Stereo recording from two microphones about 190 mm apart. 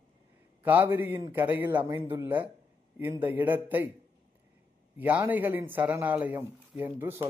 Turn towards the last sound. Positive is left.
turn(degrees=-10)  # may be behind; listen again after turning